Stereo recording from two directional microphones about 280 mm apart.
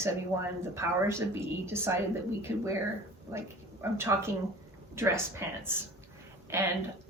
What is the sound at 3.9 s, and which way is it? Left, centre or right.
A woman's voice, centre.